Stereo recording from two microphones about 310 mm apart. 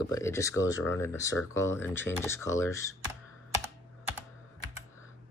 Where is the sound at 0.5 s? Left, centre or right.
Left.